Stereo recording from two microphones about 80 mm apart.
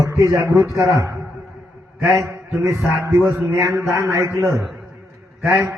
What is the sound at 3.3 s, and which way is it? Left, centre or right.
Speech, right.